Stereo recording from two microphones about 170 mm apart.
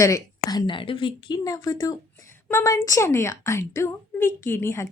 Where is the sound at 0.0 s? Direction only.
20° left (ahead or behind).